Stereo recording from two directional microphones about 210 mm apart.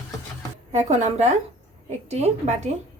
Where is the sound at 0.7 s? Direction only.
30° right (ahead or behind).